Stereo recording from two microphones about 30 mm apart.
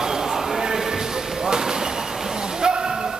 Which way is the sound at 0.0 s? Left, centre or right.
Centre.